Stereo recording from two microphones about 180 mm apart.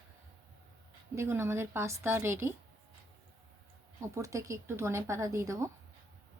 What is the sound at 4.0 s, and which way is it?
Speech, 15° right (ahead or behind).